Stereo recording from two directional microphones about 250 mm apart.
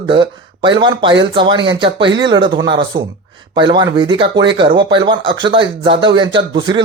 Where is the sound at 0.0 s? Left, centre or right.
Centre.